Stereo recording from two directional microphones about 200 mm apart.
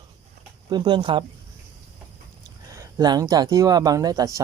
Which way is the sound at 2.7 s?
20° right (ahead or behind).